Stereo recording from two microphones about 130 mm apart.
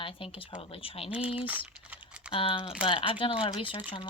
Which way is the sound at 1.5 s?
10° right (ahead or behind).